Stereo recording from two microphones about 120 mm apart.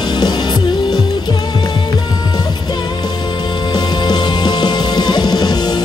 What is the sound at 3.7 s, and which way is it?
Music, 35° left (ahead or behind).